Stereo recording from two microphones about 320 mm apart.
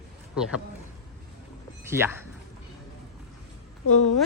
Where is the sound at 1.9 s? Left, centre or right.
Centre.